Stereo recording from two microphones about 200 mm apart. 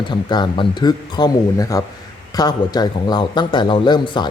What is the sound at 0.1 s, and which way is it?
Speech, 20° left (ahead or behind).